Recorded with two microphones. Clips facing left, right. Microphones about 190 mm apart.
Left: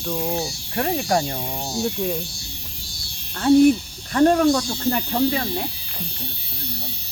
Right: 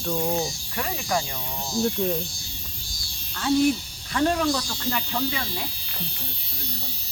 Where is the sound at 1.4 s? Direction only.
65° left (ahead or behind).